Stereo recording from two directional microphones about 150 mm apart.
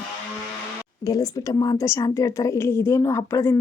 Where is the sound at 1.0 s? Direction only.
25° left (ahead or behind).